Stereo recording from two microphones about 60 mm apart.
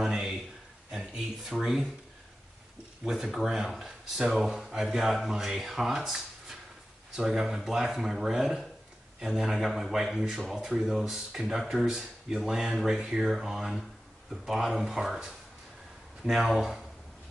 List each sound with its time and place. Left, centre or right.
0.0 s a sound: centre
0.9 s speech: centre
3.0 s speech: centre